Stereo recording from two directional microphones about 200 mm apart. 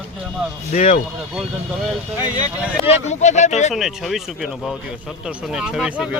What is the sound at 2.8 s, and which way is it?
Speech, 35° left (ahead or behind).